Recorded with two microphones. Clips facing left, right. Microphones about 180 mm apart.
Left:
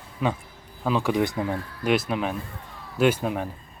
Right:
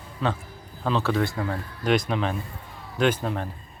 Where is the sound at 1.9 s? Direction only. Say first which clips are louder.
Even; 5° left (ahead or behind).